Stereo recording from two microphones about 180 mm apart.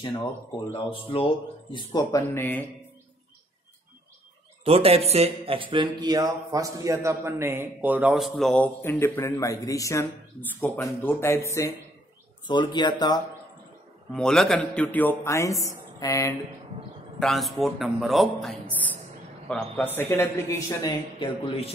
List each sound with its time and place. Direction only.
0.9 s speech: 30° left (ahead or behind); by 2.6 s 10° left (ahead or behind)
4.6 s speech: 35° right (ahead or behind); by 13.2 s 25° left (ahead or behind)
14.1 s a man's voice: 5° left (ahead or behind)
17.2 s a man's voice: centre (ahead or behind); by 21.7 s 30° left (ahead or behind)